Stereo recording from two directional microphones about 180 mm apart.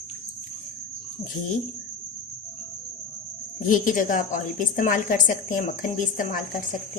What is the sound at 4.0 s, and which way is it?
A woman's voice, 45° left (ahead or behind).